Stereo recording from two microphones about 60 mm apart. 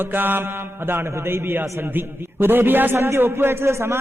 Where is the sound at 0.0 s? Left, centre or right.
Right.